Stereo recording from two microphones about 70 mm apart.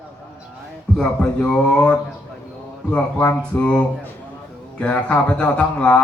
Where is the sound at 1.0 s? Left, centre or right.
Centre.